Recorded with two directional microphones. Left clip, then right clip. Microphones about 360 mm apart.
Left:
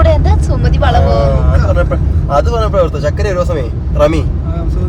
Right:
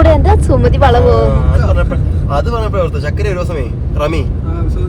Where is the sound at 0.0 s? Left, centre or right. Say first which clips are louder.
Right 3 dB; centre.